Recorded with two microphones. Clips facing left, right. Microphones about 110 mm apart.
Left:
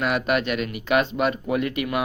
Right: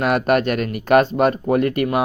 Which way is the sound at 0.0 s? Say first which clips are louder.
Right 6 dB; 45° right (ahead or behind).